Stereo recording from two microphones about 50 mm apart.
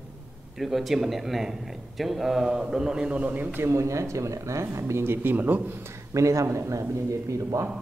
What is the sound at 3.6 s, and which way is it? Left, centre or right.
A man's voice, right.